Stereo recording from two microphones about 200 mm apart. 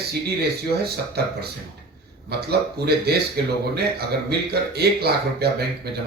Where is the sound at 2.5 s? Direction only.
55° right (ahead or behind).